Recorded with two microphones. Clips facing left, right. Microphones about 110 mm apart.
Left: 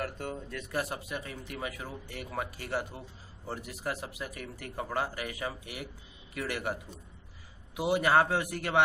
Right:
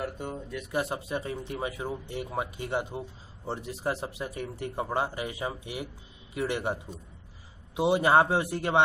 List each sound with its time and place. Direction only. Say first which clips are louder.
0.0 s speech: right 2 dB; 15° right (ahead or behind)